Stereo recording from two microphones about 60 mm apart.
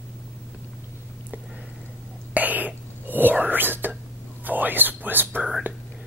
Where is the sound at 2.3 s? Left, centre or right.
Right.